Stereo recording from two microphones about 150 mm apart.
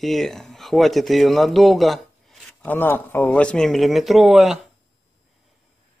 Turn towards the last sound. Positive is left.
turn(degrees=0)  # may be behind; listen again after turning